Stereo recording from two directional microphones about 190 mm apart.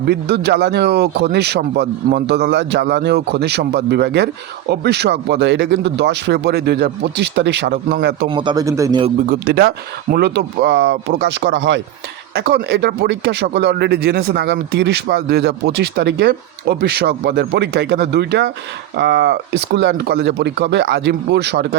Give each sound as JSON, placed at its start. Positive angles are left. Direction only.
{"t": 0.0, "sound": "speech", "side_deg": -60}
{"t": 8.3, "sound": "speech", "side_deg": -25}
{"t": 9.3, "sound": "speech", "side_deg": -55}